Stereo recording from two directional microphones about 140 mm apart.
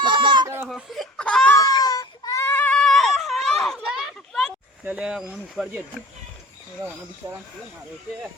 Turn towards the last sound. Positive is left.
turn(degrees=-15)  # may be behind; listen again after turning